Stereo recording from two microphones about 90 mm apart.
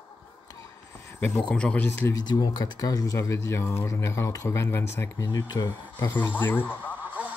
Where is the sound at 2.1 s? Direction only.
45° left (ahead or behind); by 5.1 s 30° left (ahead or behind).